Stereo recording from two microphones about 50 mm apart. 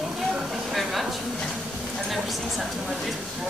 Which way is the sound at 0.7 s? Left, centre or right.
Centre.